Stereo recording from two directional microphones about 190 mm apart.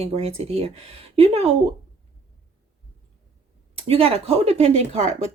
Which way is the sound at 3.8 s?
30° right (ahead or behind).